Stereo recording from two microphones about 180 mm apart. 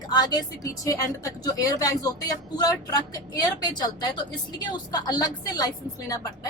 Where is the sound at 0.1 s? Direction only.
25° left (ahead or behind).